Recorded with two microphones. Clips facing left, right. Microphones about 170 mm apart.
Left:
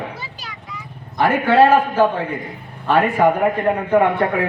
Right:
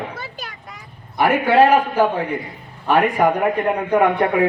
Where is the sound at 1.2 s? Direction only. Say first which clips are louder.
Even; 15° right (ahead or behind).